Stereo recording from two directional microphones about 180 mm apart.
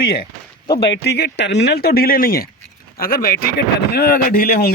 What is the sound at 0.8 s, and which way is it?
Speech, 70° left (ahead or behind).